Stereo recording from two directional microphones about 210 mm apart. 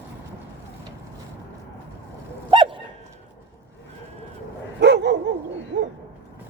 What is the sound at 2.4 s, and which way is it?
Dog, 25° right (ahead or behind).